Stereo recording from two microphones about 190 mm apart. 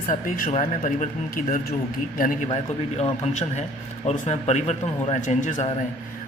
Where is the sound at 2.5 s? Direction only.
35° left (ahead or behind).